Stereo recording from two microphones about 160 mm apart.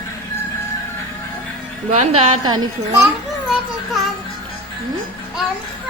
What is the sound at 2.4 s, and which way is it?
Speech, 25° right (ahead or behind).